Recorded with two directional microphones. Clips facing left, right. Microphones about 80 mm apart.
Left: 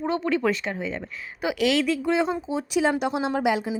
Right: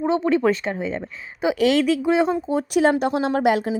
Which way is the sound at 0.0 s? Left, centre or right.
Right.